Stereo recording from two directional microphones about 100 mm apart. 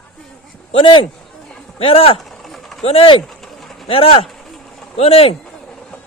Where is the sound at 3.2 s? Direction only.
Centre (ahead or behind).